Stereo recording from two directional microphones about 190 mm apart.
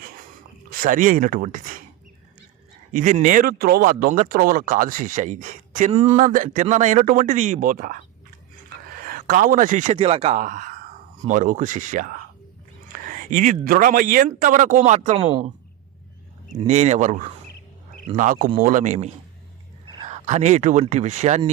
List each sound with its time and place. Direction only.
0.7 s speech: 45° right (ahead or behind)
2.9 s speech: 40° right (ahead or behind)
8.7 s a sound: 50° right (ahead or behind)
9.9 s speech: 30° right (ahead or behind)
16.6 s speech: 35° right (ahead or behind)